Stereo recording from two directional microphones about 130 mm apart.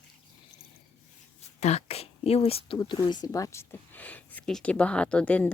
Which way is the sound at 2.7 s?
35° left (ahead or behind).